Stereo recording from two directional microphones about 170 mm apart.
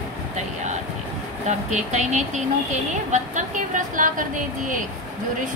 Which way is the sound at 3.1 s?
50° right (ahead or behind).